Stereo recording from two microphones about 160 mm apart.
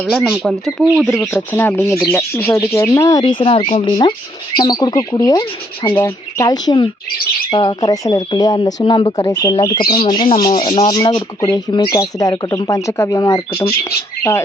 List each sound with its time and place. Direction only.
0.0 s speech: centre (ahead or behind)
1.2 s speech: 15° left (ahead or behind)